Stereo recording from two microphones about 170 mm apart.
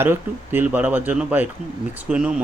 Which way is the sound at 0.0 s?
10° right (ahead or behind).